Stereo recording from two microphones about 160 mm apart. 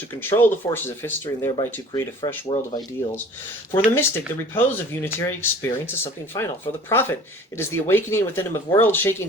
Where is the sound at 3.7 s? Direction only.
15° left (ahead or behind).